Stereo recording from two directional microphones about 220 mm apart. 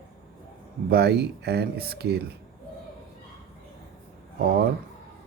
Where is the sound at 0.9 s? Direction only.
45° right (ahead or behind).